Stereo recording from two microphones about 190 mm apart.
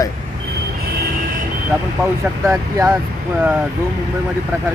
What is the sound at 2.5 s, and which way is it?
Speech, 15° right (ahead or behind).